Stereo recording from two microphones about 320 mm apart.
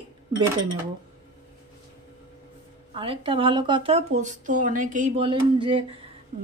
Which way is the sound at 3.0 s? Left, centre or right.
Centre.